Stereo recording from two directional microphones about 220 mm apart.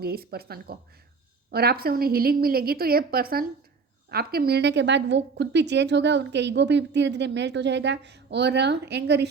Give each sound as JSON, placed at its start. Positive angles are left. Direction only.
{"t": 0.0, "sound": "a woman's voice", "side_deg": -45}